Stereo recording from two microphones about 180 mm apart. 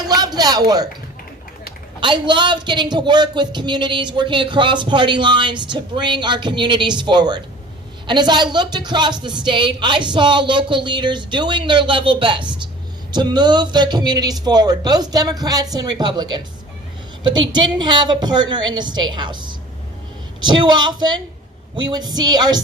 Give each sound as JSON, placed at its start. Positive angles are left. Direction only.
{"t": 0.1, "sound": "a sound", "side_deg": -20}
{"t": 2.0, "sound": "a man's voice", "side_deg": -25}
{"t": 17.5, "sound": "a man's voice", "side_deg": -25}